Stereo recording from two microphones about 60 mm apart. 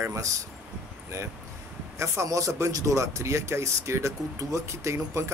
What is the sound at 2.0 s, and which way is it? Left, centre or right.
Speech, right.